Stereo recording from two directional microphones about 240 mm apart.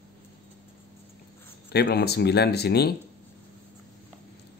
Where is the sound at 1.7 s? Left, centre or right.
Left.